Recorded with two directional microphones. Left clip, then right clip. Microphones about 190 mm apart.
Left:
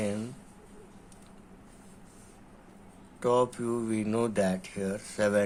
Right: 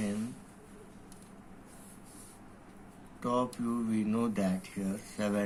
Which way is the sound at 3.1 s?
60° left (ahead or behind).